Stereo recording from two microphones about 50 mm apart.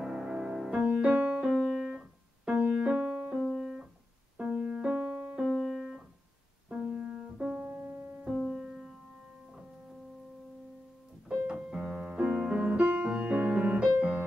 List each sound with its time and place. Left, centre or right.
0.0 s music: centre
0.8 s music: right
1.3 s keyboard: centre
2.9 s music: right
3.4 s keyboard: centre
4.4 s music: right
4.6 s music: centre
5.3 s music: centre
6.7 s music: right
7.6 s piano: right
8.4 s music: centre
8.6 s music: centre
11.4 s music: right
13.9 s music: right